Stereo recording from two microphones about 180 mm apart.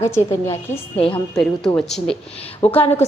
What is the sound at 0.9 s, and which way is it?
Speech, 30° left (ahead or behind).